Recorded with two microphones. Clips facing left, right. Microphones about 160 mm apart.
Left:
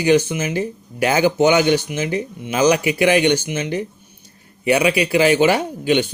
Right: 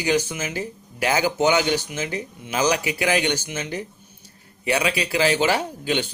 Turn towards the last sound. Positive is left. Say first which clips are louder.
# left 6 dB
turn(degrees=20)  # may be behind; listen again after turning